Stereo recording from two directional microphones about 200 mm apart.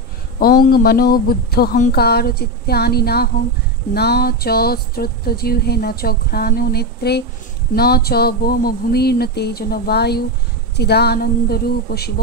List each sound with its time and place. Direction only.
0.4 s speech: 50° left (ahead or behind)